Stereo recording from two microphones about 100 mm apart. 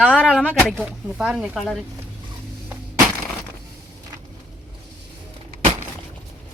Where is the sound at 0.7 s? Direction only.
Centre (ahead or behind).